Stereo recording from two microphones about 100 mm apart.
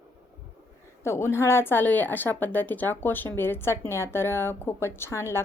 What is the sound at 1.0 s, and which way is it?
Speech, 25° left (ahead or behind).